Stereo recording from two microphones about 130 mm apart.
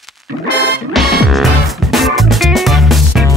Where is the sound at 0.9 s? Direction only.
Centre (ahead or behind).